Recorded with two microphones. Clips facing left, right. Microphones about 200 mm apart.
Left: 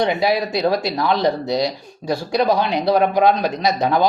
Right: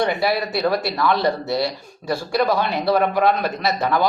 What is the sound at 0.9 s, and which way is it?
Speech, 20° left (ahead or behind).